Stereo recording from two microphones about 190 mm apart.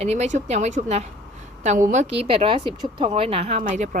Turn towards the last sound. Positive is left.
turn(degrees=-40)  # may be behind; listen again after turning